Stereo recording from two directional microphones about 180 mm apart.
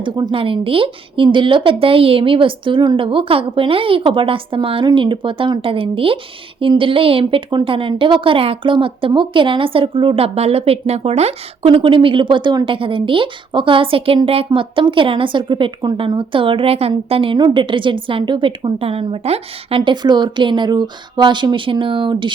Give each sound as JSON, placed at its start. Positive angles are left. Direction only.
{"t": 0.0, "sound": "a woman's voice", "side_deg": -25}